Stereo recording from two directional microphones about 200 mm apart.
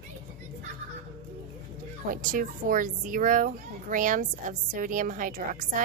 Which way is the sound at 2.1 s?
45° right (ahead or behind).